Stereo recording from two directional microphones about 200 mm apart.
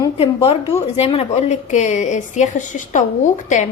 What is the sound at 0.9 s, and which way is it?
A woman's voice, 30° left (ahead or behind).